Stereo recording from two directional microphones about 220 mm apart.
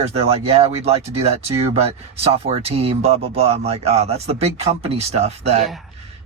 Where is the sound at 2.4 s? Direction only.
25° right (ahead or behind).